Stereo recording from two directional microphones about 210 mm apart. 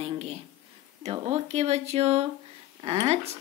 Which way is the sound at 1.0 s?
30° right (ahead or behind).